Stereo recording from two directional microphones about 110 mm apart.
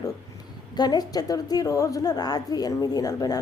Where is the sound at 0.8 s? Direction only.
35° left (ahead or behind).